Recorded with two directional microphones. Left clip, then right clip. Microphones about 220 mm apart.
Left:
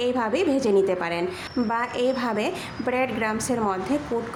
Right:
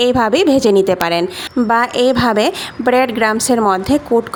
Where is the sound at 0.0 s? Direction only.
40° right (ahead or behind).